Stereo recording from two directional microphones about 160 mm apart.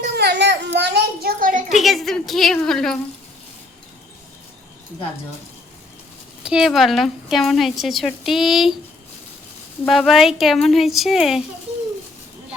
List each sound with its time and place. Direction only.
0.2 s a sound: 90° right; by 1.6 s 60° right (ahead or behind)
1.7 s a woman's voice: centre (ahead or behind)
6.4 s a woman's voice: 5° right (ahead or behind)
9.8 s a woman's voice: centre (ahead or behind)